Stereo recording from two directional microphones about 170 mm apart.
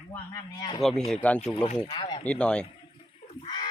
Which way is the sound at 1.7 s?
30° left (ahead or behind).